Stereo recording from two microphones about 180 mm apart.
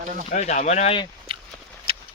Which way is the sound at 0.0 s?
45° right (ahead or behind).